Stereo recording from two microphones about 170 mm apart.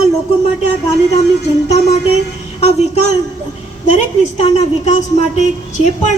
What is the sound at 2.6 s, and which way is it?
A woman's voice, 40° left (ahead or behind).